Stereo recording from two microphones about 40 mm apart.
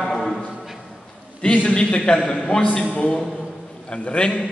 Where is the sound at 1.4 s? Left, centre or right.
Left.